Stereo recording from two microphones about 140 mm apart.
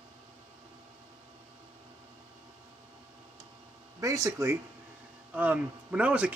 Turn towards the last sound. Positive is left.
turn(degrees=-10)  # may be behind; listen again after turning